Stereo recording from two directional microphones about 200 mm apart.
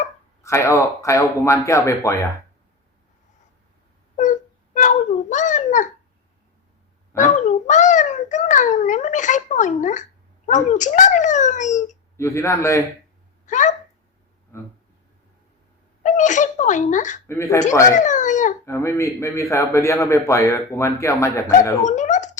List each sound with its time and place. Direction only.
0.4 s a man's voice: 15° left (ahead or behind)
4.2 s wail: 40° left (ahead or behind)
7.3 s a child's voice: 35° left (ahead or behind)
12.1 s a man's voice: 15° left (ahead or behind)
13.4 s speech: 40° left (ahead or behind)
16.0 s speech: 40° left (ahead or behind)
17.2 s a man's voice: 15° left (ahead or behind)
17.8 s speech: 40° left (ahead or behind)
18.6 s a man's voice: 15° left (ahead or behind)
21.8 s speech: 40° left (ahead or behind)